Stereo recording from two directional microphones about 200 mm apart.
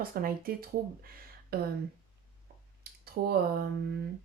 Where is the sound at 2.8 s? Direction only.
50° right (ahead or behind).